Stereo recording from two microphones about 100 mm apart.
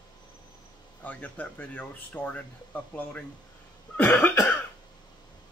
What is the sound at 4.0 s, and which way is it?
Cough, 20° left (ahead or behind).